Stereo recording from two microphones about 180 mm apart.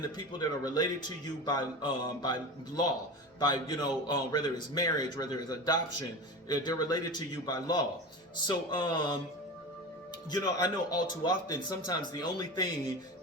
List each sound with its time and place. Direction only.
0.2 s a man's voice: 20° left (ahead or behind)
10.3 s a man's voice: 20° left (ahead or behind)